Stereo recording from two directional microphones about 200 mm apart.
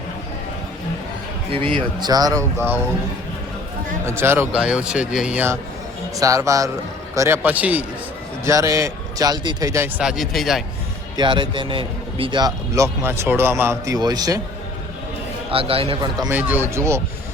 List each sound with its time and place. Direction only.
1.5 s a man's voice: 25° right (ahead or behind)
4.0 s a man's voice: 10° right (ahead or behind)
10.0 s speech: 5° right (ahead or behind)
11.2 s a man's voice: 25° right (ahead or behind)
15.4 s a man's voice: 30° right (ahead or behind)